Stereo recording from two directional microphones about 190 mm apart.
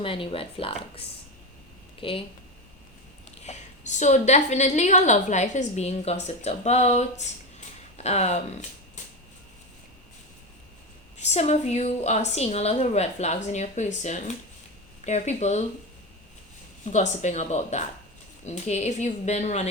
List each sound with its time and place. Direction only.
0.0 s speech: 30° left (ahead or behind)
3.4 s a woman's voice: 40° left (ahead or behind)
11.2 s a woman's voice: 35° left (ahead or behind)
16.8 s a woman's voice: 40° left (ahead or behind)